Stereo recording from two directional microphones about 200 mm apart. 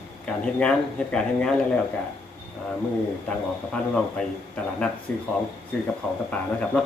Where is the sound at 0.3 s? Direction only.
5° left (ahead or behind).